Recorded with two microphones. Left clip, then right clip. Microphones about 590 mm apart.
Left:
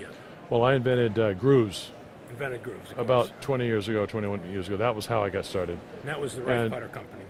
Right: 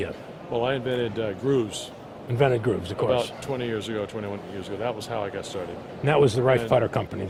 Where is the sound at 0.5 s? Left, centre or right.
Left.